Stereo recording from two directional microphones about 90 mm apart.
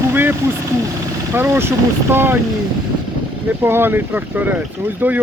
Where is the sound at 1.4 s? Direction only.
25° right (ahead or behind).